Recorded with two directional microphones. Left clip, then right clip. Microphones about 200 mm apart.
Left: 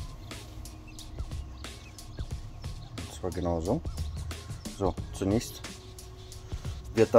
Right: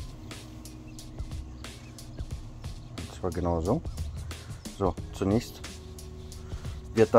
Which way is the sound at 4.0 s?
Centre (ahead or behind).